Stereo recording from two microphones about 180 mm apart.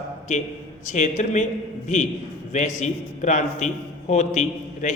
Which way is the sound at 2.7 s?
40° left (ahead or behind).